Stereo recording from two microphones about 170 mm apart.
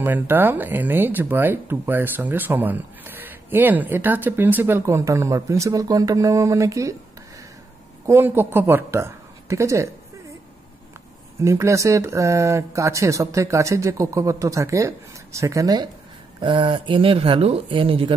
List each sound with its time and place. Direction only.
0.0 s speech: 10° right (ahead or behind)
8.1 s speech: 15° right (ahead or behind)
11.4 s speech: 15° right (ahead or behind)